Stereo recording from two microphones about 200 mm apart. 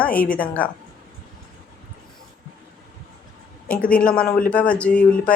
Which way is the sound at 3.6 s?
5° left (ahead or behind).